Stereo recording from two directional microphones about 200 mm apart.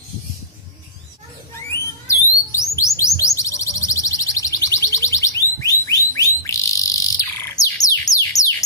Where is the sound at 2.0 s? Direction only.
15° left (ahead or behind).